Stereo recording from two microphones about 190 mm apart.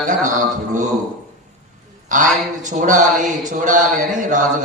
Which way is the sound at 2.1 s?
40° right (ahead or behind).